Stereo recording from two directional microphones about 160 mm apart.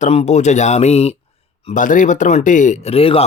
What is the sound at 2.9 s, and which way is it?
Speech, 35° left (ahead or behind).